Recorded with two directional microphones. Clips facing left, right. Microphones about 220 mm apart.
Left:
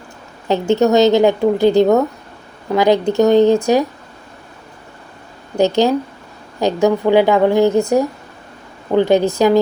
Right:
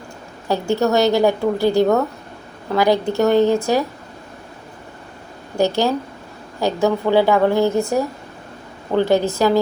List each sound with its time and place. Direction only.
0.4 s a woman's voice: 20° left (ahead or behind)
5.5 s a woman's voice: 20° left (ahead or behind)